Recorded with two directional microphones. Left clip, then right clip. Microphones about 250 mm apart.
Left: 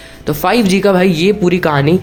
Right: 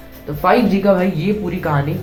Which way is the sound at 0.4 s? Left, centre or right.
Left.